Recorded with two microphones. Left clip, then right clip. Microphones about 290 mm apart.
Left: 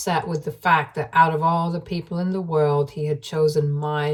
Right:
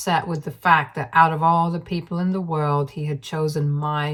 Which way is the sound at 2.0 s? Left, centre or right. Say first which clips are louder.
Even; right.